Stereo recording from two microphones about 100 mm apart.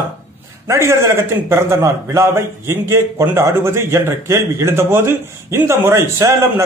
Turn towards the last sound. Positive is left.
turn(degrees=-30)  # may be behind; listen again after turning